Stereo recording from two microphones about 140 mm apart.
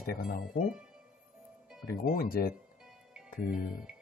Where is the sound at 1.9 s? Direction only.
90° left.